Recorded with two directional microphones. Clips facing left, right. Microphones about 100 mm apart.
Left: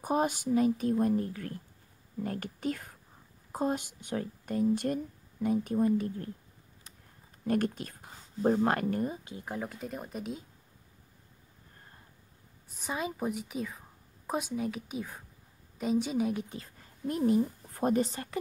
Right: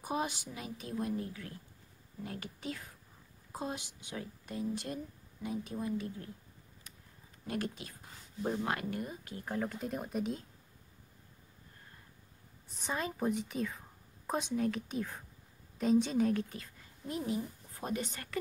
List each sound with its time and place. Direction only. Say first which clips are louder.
0.0 s speech: left 7 dB; 45° left (ahead or behind)
7.4 s speech: left 8 dB; 50° left (ahead or behind)
9.1 s speech: left 1 dB; 20° left (ahead or behind)
9.7 s speech: right 1 dB; centre (ahead or behind)
12.7 s a woman's voice: left 2 dB; 5° left (ahead or behind)
16.4 s speech: left 3 dB; 30° left (ahead or behind)
16.8 s a sound: left 9 dB; 50° left (ahead or behind)
18.0 s speech: left 4 dB; 30° left (ahead or behind)